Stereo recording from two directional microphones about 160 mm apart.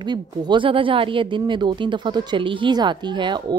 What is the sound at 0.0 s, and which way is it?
Speech, 30° right (ahead or behind).